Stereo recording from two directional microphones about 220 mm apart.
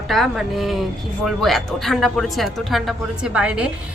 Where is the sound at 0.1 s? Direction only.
Centre (ahead or behind).